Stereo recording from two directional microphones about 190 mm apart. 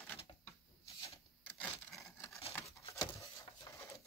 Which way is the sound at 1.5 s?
10° left (ahead or behind).